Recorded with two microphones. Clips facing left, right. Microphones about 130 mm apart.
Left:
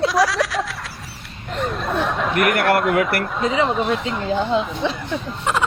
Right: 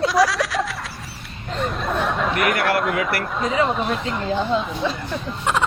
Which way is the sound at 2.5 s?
55° left (ahead or behind).